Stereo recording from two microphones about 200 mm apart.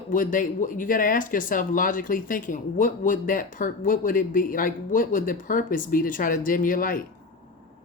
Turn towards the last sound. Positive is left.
turn(degrees=45)  # may be behind; listen again after turning